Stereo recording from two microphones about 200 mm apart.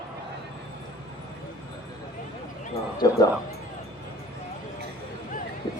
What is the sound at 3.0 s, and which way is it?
Music, 20° left (ahead or behind).